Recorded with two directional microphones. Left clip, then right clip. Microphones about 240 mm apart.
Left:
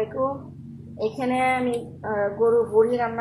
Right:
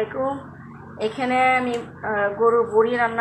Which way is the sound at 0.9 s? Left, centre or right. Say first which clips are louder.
Right 3 dB; centre.